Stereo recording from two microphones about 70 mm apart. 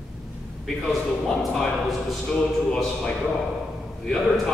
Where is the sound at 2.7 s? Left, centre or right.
Centre.